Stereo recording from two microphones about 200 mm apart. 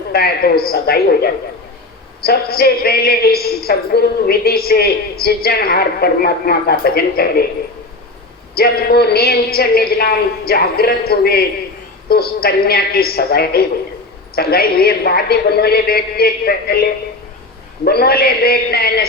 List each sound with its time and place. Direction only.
0.1 s a woman's voice: 50° left (ahead or behind)
8.5 s a woman's voice: 50° left (ahead or behind)